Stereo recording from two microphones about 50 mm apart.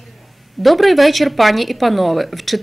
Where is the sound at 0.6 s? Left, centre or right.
Centre.